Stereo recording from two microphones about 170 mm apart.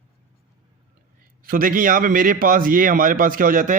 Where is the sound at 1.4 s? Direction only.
55° right (ahead or behind).